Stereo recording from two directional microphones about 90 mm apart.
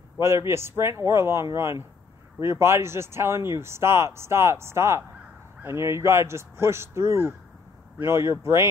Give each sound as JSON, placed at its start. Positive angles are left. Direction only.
{"t": 0.2, "sound": "speech", "side_deg": -30}